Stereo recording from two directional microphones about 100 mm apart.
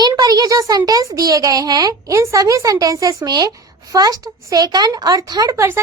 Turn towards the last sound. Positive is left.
turn(degrees=-35)  # may be behind; listen again after turning